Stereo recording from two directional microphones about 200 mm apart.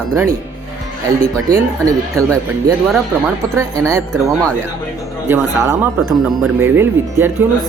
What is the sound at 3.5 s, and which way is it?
Speech, 15° right (ahead or behind).